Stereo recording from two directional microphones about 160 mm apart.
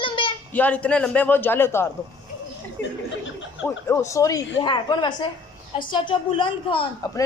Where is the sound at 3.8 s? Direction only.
15° left (ahead or behind); by 6.8 s 35° left (ahead or behind).